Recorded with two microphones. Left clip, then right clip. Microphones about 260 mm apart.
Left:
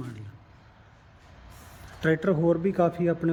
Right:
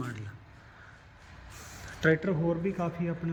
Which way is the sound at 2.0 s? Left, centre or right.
Centre.